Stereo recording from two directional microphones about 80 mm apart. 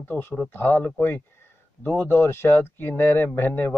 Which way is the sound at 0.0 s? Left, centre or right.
Left.